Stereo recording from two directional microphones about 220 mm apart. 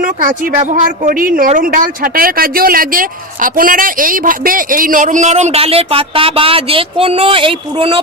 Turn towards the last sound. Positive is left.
turn(degrees=-25)  # may be behind; listen again after turning